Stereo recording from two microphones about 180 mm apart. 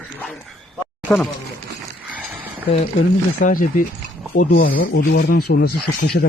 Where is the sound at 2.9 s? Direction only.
50° left (ahead or behind).